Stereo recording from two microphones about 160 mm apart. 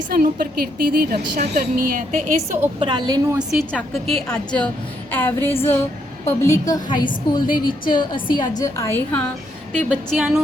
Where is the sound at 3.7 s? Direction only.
5° left (ahead or behind).